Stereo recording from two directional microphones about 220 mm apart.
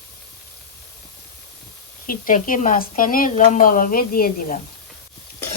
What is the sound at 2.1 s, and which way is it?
Speech, 40° left (ahead or behind).